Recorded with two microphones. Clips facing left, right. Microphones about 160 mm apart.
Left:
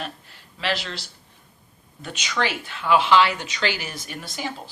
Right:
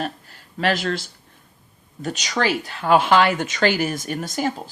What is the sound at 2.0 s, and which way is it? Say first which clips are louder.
Speech: right 3 dB; 40° right (ahead or behind).